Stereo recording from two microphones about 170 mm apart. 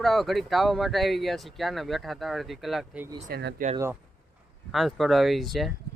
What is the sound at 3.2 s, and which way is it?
Speech, 80° right.